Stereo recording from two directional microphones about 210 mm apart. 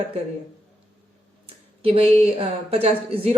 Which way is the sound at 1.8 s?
30° right (ahead or behind).